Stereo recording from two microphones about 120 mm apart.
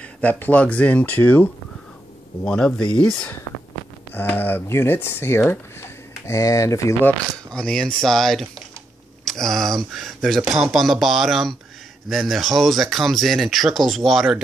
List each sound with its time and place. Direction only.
0.0 s speech: 10° left (ahead or behind)